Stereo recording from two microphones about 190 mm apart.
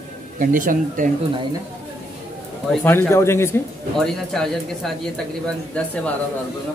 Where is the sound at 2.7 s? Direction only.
Centre (ahead or behind).